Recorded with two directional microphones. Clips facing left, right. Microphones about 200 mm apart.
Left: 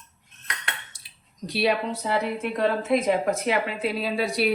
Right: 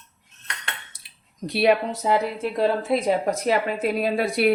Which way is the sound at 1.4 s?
55° right (ahead or behind).